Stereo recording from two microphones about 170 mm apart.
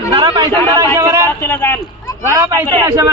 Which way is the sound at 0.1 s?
30° right (ahead or behind).